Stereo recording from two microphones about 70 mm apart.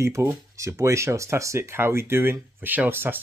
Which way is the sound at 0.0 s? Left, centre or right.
Right.